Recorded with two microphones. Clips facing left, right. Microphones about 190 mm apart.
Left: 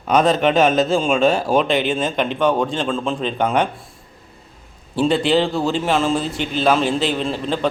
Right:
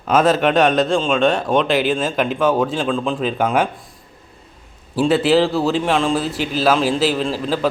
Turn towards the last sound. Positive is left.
turn(degrees=0)  # may be behind; listen again after turning